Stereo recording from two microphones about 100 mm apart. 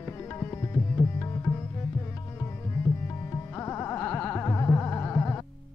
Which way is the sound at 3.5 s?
25° left (ahead or behind).